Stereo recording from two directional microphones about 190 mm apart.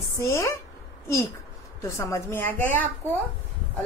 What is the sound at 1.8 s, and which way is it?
A woman's voice, 15° left (ahead or behind).